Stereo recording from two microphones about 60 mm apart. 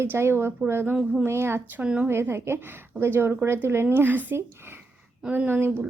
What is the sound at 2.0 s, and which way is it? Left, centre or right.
Speech, right.